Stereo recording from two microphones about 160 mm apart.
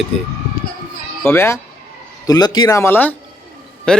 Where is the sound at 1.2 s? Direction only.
15° left (ahead or behind).